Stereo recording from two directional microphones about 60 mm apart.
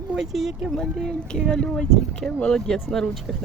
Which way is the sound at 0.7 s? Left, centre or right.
Centre.